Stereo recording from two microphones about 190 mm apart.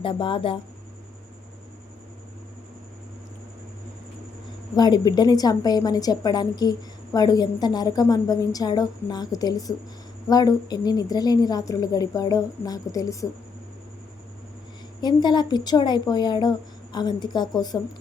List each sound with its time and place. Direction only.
0.0 s a woman's voice: 25° left (ahead or behind)
4.7 s a woman's voice: 20° left (ahead or behind)
15.0 s a woman's voice: 20° left (ahead or behind)